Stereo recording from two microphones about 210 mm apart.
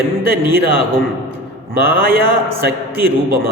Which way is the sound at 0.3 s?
45° right (ahead or behind).